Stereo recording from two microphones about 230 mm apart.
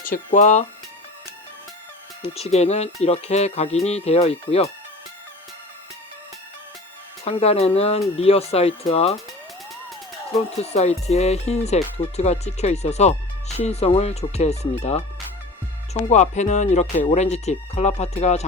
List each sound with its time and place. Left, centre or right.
0.0 s speech: left
2.2 s speech: left
7.3 s speech: left
10.6 s speech: left